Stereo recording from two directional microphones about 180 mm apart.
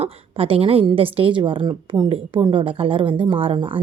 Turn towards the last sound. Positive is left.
turn(degrees=-30)  # may be behind; listen again after turning